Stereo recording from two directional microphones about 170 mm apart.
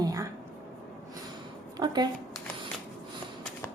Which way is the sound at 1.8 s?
25° right (ahead or behind).